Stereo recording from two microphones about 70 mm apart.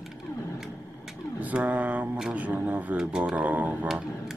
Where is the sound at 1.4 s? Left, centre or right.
Right.